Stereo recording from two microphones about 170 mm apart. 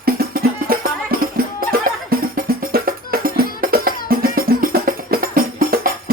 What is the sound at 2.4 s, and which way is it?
Music, 60° right (ahead or behind).